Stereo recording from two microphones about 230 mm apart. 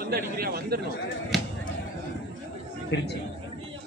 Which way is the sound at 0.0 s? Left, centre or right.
Right.